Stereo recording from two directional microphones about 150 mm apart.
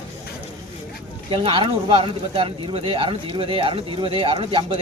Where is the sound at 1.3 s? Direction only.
35° right (ahead or behind).